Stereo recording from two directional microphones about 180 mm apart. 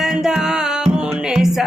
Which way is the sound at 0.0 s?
5° right (ahead or behind).